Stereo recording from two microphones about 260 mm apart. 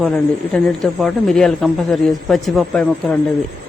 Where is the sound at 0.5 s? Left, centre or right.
Centre.